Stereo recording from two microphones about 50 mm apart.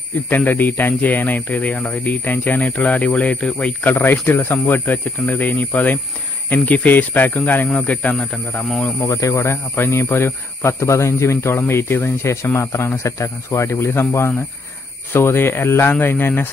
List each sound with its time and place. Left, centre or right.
0.4 s speech: left
3.8 s speech: left
9.2 s speech: left
9.8 s speech: left
11.5 s speech: left